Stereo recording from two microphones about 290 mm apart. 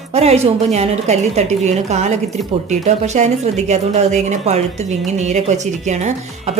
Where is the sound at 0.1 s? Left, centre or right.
Right.